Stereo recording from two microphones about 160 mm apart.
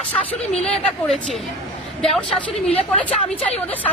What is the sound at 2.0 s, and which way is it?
Speech, 5° left (ahead or behind).